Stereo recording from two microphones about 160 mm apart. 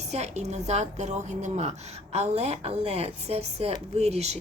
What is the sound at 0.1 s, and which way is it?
A woman's voice, 45° right (ahead or behind).